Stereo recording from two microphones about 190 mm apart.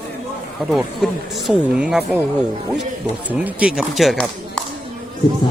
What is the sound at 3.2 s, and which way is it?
Speech, 5° right (ahead or behind).